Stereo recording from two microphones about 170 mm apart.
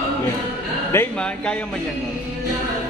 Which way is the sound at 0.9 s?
10° left (ahead or behind).